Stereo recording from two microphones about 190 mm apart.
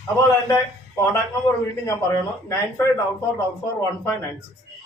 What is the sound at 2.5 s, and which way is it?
Speech, 15° left (ahead or behind).